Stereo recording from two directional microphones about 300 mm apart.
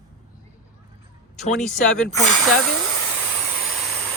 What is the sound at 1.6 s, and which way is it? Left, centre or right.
Speech, centre.